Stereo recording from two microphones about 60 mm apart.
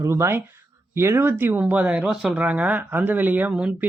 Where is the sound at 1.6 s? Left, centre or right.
Right.